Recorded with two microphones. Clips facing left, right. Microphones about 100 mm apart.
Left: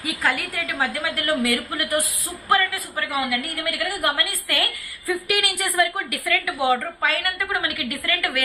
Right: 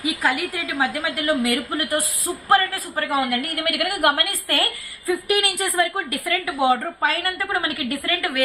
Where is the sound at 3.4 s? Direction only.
55° right (ahead or behind).